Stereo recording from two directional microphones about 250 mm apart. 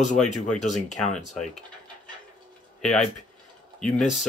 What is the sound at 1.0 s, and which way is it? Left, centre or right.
Speech, left.